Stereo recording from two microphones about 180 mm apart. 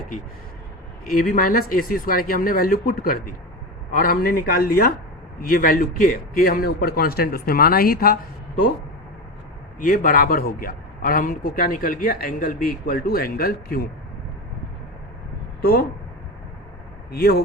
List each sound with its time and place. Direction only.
1.1 s a man's voice: 50° left (ahead or behind)
9.8 s a man's voice: 50° left (ahead or behind)
15.6 s a man's voice: 55° left (ahead or behind)
17.1 s a man's voice: 60° left (ahead or behind)